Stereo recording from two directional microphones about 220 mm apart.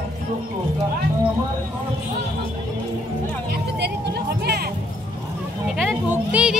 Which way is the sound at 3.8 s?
50° right (ahead or behind).